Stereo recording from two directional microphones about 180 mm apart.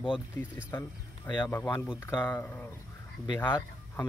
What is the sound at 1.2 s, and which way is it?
Speech, 25° left (ahead or behind).